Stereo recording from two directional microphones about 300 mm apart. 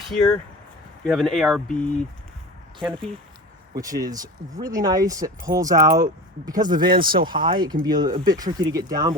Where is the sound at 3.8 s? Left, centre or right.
Centre.